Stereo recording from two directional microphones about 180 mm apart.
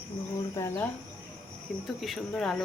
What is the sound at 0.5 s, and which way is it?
Speech, 15° left (ahead or behind).